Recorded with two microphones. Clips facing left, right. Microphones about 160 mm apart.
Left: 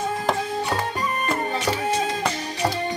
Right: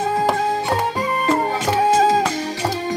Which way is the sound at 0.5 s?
90° right.